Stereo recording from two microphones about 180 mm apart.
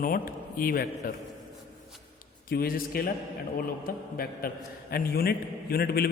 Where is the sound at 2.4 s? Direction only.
55° left (ahead or behind).